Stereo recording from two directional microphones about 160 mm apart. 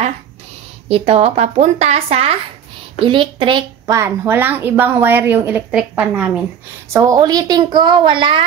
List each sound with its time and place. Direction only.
0.8 s a woman's voice: 40° right (ahead or behind)
3.9 s a woman's voice: 15° right (ahead or behind)
6.9 s a woman's voice: 20° right (ahead or behind)